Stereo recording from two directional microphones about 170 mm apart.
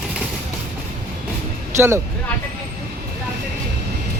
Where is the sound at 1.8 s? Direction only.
15° right (ahead or behind).